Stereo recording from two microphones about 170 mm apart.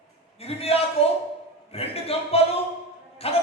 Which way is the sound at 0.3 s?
35° left (ahead or behind).